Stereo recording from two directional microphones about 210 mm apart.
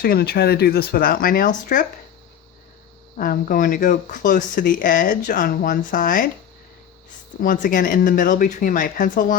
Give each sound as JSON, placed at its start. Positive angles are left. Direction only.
{"t": 0.0, "sound": "speech", "side_deg": 45}
{"t": 3.2, "sound": "speech", "side_deg": 40}
{"t": 7.4, "sound": "speech", "side_deg": 40}